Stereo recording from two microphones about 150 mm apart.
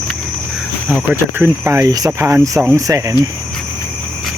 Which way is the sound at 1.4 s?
15° right (ahead or behind).